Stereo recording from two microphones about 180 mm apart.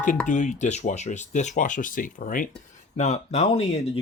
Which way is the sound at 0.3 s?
40° left (ahead or behind).